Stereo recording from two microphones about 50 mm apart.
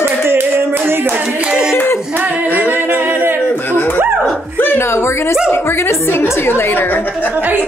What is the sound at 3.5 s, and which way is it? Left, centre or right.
Chuckle, left.